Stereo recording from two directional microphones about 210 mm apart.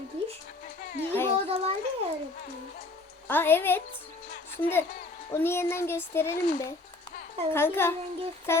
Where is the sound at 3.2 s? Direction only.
10° left (ahead or behind).